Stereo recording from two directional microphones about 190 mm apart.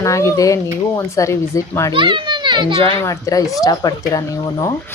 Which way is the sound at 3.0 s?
15° left (ahead or behind).